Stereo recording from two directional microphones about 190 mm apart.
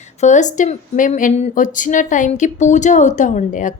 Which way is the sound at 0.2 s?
40° left (ahead or behind).